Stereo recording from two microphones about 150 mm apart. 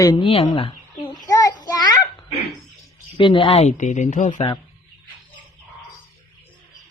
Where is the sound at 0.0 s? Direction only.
30° left (ahead or behind).